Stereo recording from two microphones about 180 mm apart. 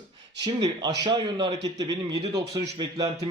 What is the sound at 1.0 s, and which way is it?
A man's voice, 25° right (ahead or behind).